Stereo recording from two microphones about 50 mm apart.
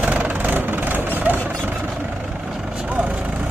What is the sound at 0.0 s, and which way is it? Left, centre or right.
Vehicle, right.